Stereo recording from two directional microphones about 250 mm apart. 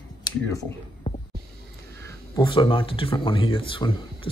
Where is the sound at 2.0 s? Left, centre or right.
Centre.